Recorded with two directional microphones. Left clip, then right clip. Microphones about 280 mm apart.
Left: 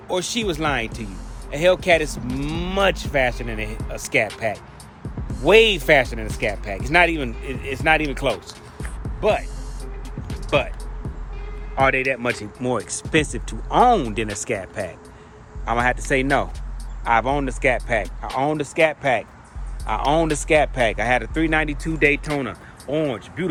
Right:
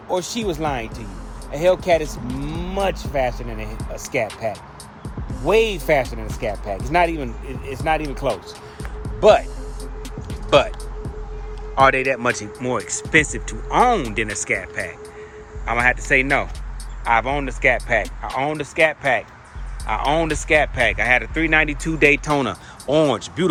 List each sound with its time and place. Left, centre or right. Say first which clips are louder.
0.1 s speech: even; centre
9.2 s speech: right 7 dB; centre
11.7 s speech: right 3 dB; centre